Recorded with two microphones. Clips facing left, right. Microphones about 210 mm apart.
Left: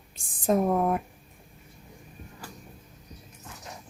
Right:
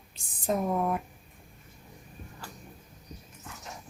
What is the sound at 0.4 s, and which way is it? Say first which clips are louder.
Speech: left 5 dB; 50° left (ahead or behind).